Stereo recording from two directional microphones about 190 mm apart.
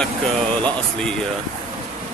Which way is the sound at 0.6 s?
5° left (ahead or behind).